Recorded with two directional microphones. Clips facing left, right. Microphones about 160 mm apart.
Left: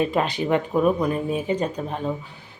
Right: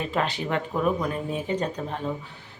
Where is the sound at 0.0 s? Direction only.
15° left (ahead or behind).